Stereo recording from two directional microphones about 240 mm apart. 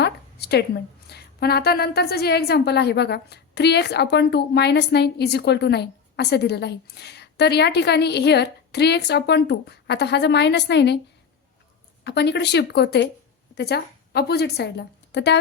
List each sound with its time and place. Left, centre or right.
0.0 s a sound: left
1.0 s a woman's voice: left
12.0 s a woman's voice: left